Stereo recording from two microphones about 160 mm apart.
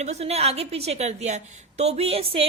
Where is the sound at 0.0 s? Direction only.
45° right (ahead or behind).